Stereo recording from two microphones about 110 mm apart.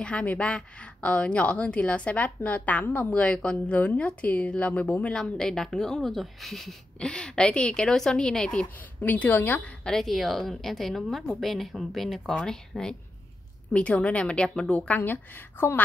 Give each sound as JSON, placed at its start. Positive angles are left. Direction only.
{"t": 0.0, "sound": "a woman's voice", "side_deg": 10}
{"t": 9.8, "sound": "a woman's voice", "side_deg": 5}